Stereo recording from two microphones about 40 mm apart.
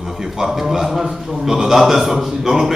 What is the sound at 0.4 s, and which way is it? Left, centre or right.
A man's voice, centre.